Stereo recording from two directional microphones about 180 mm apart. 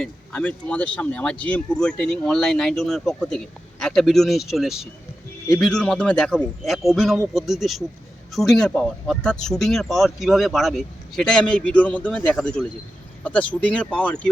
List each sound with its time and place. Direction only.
0.0 s speech: 5° left (ahead or behind)